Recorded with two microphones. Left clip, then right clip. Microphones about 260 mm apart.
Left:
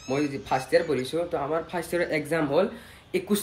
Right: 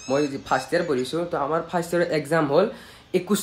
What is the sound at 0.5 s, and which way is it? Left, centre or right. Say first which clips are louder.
Speech: left 1 dB; centre.